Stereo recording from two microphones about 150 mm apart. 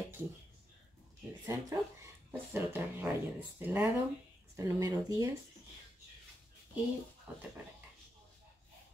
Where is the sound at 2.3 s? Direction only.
15° right (ahead or behind).